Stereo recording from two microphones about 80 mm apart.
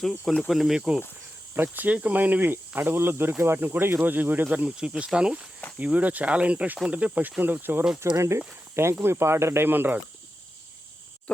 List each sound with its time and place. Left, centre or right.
0.0 s speech: centre
1.5 s speech: right
7.9 s speech: right